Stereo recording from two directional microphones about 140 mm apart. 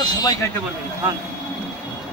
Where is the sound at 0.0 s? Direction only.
30° left (ahead or behind).